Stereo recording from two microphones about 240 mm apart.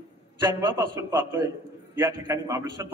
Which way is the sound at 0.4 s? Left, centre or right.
Centre.